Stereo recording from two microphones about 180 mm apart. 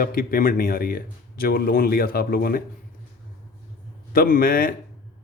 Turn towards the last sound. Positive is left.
turn(degrees=55)  # may be behind; listen again after turning